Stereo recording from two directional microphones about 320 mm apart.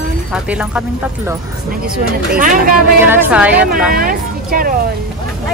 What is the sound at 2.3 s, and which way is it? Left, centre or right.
Speech, right.